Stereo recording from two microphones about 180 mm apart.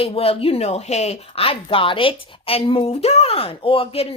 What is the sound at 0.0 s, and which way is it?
Speech, 30° left (ahead or behind).